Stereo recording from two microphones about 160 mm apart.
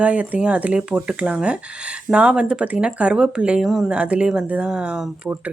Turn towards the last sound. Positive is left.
turn(degrees=-5)  # may be behind; listen again after turning